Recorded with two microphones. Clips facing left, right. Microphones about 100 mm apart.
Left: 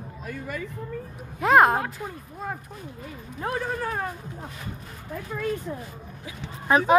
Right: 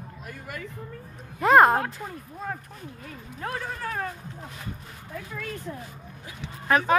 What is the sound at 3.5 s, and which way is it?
Speech, 15° left (ahead or behind).